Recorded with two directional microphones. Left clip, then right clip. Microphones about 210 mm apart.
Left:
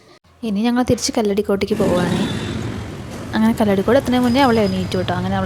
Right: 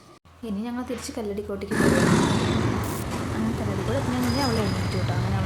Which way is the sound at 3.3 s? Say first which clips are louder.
Left 16 dB; 45° left (ahead or behind).